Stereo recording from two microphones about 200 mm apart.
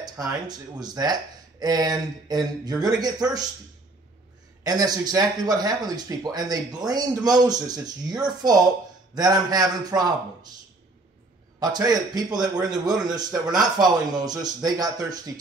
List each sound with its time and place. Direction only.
0.0 s speech: 20° right (ahead or behind)
4.6 s speech: 20° right (ahead or behind)
11.6 s speech: 20° right (ahead or behind)